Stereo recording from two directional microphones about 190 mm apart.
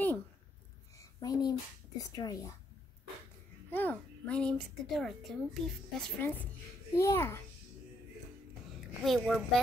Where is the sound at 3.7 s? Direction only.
10° left (ahead or behind).